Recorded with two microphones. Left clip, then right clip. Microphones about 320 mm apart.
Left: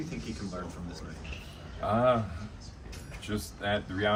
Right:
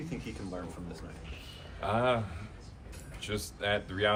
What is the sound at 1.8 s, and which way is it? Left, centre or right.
Speech, centre.